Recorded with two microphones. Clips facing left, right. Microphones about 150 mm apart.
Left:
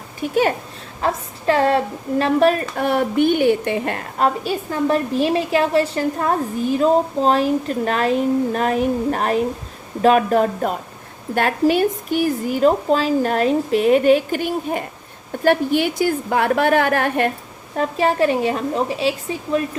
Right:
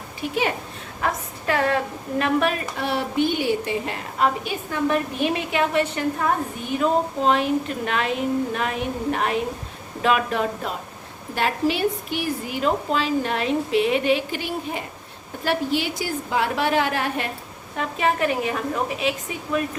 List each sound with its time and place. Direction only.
0.2 s a woman's voice: 45° left (ahead or behind)
1.0 s a woman's voice: 30° left (ahead or behind); by 3.9 s 60° left (ahead or behind)
4.2 s a woman's voice: 35° left (ahead or behind); by 17.3 s 55° left (ahead or behind)
17.7 s a woman's voice: 35° left (ahead or behind)